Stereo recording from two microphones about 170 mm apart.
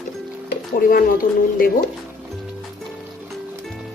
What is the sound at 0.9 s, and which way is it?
Speech, 60° left (ahead or behind).